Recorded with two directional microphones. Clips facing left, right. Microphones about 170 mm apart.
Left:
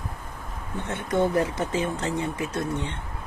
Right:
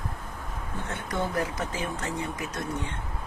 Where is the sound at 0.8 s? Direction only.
25° left (ahead or behind).